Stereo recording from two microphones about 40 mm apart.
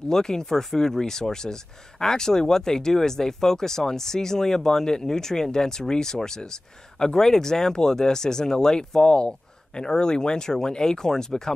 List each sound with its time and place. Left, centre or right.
0.1 s speech: centre